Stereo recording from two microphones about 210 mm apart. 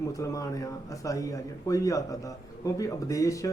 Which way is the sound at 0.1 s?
15° left (ahead or behind).